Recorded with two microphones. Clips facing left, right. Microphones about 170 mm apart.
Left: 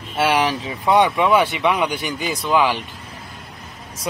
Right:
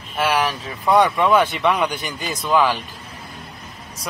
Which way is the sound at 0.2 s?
25° left (ahead or behind).